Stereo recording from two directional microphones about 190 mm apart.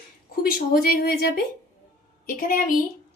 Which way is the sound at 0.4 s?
50° left (ahead or behind).